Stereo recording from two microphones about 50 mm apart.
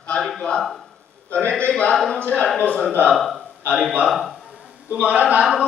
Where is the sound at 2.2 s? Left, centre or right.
Left.